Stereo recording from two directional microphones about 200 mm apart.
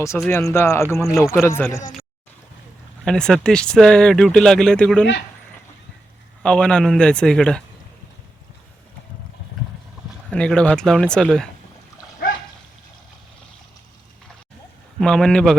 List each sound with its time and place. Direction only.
0.3 s a man's voice: 15° left (ahead or behind)
3.0 s speech: 5° left (ahead or behind)
6.4 s speech: 5° left (ahead or behind)
10.2 s speech: 5° left (ahead or behind)
14.9 s speech: 5° left (ahead or behind)